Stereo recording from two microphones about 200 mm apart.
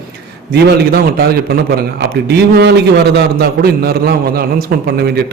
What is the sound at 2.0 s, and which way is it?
A man's voice, 55° right (ahead or behind).